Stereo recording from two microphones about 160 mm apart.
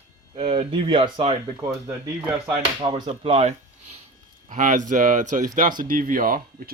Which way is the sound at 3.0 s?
40° right (ahead or behind).